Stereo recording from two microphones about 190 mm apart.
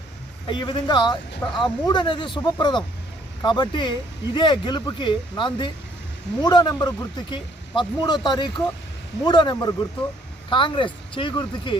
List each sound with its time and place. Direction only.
0.4 s speech: 25° left (ahead or behind)